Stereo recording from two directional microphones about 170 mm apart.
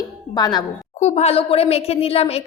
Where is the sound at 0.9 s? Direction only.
40° left (ahead or behind).